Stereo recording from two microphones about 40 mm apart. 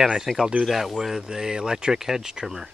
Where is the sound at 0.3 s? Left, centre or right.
Centre.